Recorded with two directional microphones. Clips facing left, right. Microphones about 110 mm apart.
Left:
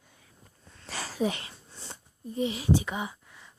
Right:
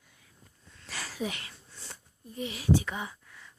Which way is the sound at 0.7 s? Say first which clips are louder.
Left 3 dB; 35° left (ahead or behind).